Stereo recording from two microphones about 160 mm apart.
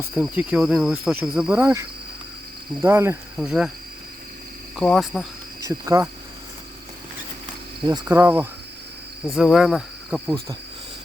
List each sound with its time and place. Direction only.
0.0 s speech: 10° right (ahead or behind)
2.8 s speech: 15° right (ahead or behind)
3.3 s cricket: centre (ahead or behind)
4.8 s cricket: centre (ahead or behind)
5.6 s speech: 20° right (ahead or behind)
7.9 s speech: 20° right (ahead or behind)
9.3 s speech: centre (ahead or behind)
10.2 s speech: 25° right (ahead or behind)